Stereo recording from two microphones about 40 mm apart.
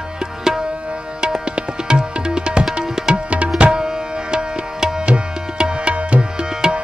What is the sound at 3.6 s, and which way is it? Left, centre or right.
Tabla, right.